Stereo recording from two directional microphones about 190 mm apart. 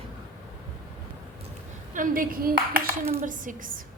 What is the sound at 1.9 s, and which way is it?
A woman's voice, 45° right (ahead or behind).